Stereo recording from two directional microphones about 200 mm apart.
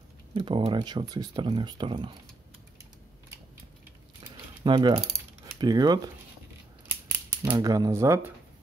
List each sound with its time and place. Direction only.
0.3 s speech: 25° right (ahead or behind)
4.2 s keys jangling: 25° right (ahead or behind)
5.6 s speech: 20° right (ahead or behind)
7.4 s speech: 15° right (ahead or behind)